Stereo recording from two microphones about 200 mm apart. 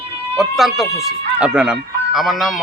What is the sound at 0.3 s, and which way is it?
Speech, centre (ahead or behind).